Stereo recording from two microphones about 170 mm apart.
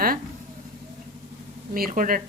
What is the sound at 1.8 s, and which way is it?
Speech, 55° right (ahead or behind).